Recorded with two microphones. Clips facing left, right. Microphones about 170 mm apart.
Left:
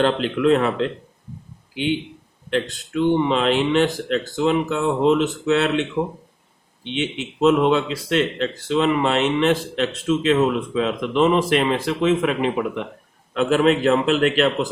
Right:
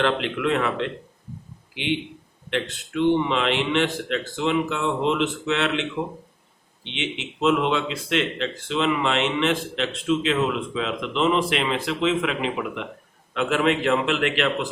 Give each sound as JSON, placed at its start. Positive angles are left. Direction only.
{"t": 0.0, "sound": "speech", "side_deg": 35}
{"t": 2.5, "sound": "speech", "side_deg": 35}
{"t": 6.9, "sound": "speech", "side_deg": 40}